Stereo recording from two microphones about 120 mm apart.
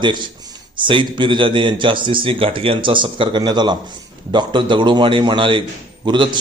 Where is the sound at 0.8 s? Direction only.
45° right (ahead or behind).